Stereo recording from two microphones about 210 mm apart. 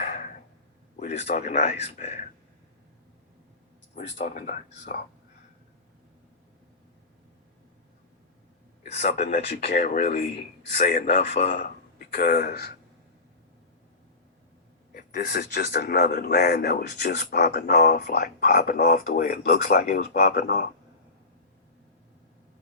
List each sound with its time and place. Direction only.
0.0 s a sound: 35° left (ahead or behind)
1.5 s a man's voice: 30° left (ahead or behind)
3.9 s a man's voice: 35° left (ahead or behind)
8.9 s a man's voice: 30° left (ahead or behind)
10.0 s a man's voice: 30° left (ahead or behind); by 12.7 s 50° left (ahead or behind)
14.9 s a man's voice: 45° left (ahead or behind)